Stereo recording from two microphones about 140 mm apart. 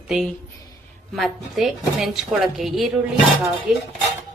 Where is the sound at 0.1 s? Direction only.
5° right (ahead or behind).